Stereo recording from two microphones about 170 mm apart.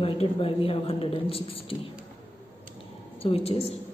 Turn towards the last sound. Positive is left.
turn(degrees=35)  # may be behind; listen again after turning